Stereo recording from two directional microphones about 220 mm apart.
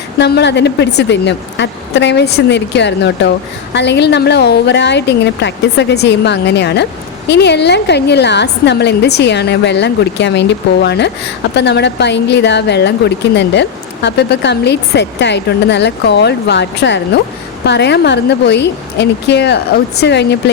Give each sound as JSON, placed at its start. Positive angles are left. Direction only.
{"t": 0.2, "sound": "a woman's voice", "side_deg": 50}